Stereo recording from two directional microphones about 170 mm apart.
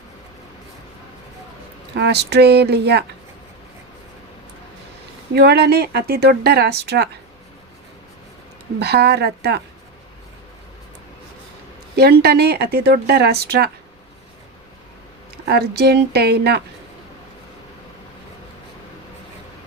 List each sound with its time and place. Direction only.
2.0 s speech: 80° right
5.3 s speech: 70° right (ahead or behind)
8.8 s speech: 70° right (ahead or behind)
11.9 s speech: 65° right (ahead or behind)
15.4 s speech: 70° right (ahead or behind)